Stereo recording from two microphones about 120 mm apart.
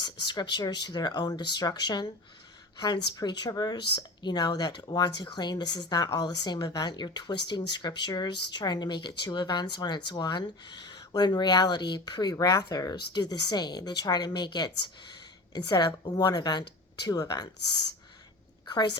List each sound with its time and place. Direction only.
0.0 s a woman's voice: 40° left (ahead or behind)